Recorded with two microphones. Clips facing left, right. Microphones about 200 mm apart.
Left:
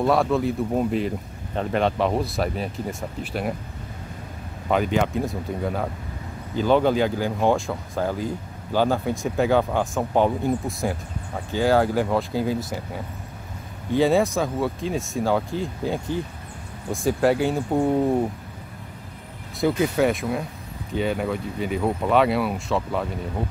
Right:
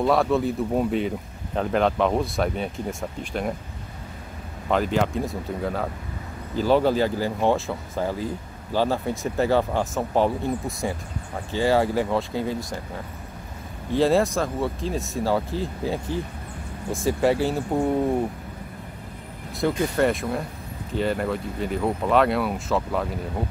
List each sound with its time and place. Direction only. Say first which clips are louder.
0.0 s speech: even; centre (ahead or behind)
4.6 s speech: left 1 dB; centre (ahead or behind)
11.5 s speech: left 1 dB; centre (ahead or behind)
13.9 s speech: left 1 dB; centre (ahead or behind)
19.6 s speech: left 1 dB; centre (ahead or behind)